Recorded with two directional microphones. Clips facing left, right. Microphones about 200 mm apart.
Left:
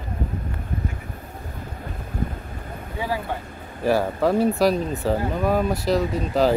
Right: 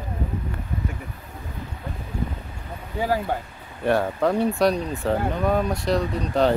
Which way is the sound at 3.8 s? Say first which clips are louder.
Left 1 dB; 5° left (ahead or behind).